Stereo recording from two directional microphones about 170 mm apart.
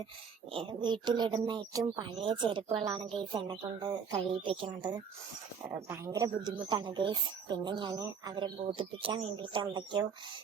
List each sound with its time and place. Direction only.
0.5 s a woman's voice: 30° right (ahead or behind)
6.1 s a woman's voice: 20° right (ahead or behind)